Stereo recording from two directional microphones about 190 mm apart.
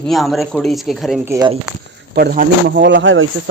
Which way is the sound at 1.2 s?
15° right (ahead or behind).